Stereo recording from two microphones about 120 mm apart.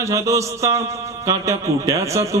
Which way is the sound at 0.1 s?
25° right (ahead or behind).